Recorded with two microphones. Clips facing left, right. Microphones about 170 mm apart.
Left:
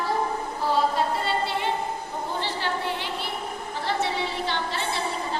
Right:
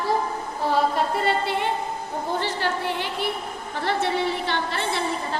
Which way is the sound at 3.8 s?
60° right (ahead or behind).